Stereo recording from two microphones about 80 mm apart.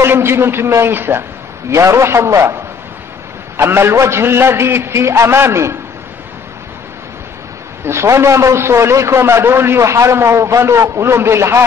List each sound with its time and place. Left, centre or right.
0.0 s a man's voice: right
3.5 s a man's voice: right
7.8 s a man's voice: right